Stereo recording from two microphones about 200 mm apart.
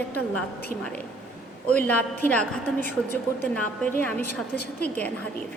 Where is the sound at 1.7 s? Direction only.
10° left (ahead or behind).